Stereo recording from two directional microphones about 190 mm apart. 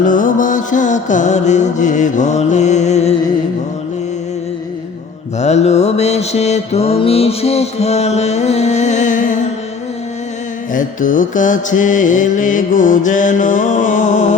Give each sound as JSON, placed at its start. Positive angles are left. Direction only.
{"t": 0.0, "sound": "mantra", "side_deg": 45}
{"t": 5.4, "sound": "mantra", "side_deg": 35}
{"t": 10.8, "sound": "mantra", "side_deg": 45}